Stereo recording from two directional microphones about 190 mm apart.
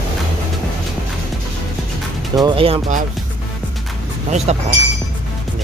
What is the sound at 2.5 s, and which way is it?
Speech, 30° right (ahead or behind).